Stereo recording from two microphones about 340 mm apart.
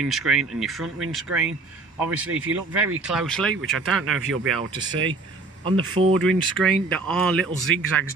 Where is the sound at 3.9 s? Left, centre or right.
Right.